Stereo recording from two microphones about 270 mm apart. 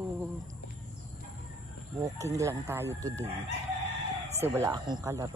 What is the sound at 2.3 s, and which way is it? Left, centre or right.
Speech, centre.